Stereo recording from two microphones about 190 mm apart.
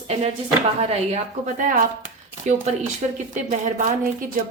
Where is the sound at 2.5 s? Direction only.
40° right (ahead or behind).